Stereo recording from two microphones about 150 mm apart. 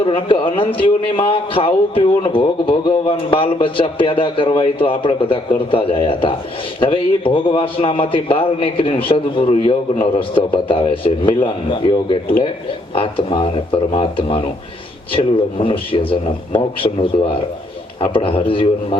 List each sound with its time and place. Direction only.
0.0 s speech: 35° left (ahead or behind)
18.0 s speech: 35° left (ahead or behind)